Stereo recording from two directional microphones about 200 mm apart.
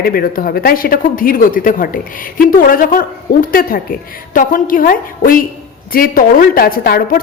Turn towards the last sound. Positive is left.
turn(degrees=45)  # may be behind; listen again after turning